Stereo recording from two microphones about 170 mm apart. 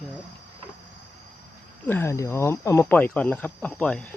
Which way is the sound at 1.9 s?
15° left (ahead or behind).